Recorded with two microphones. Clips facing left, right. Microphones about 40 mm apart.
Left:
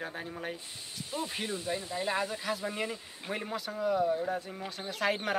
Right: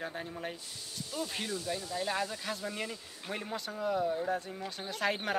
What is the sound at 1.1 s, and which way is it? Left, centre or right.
Speech, left.